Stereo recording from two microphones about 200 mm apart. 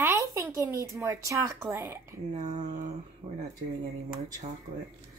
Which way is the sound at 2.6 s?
40° right (ahead or behind).